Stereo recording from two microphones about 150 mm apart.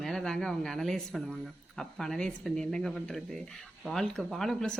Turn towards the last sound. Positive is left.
turn(degrees=5)  # may be behind; listen again after turning